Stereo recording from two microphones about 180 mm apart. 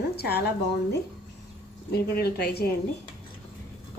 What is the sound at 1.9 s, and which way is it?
Speech, 60° left (ahead or behind).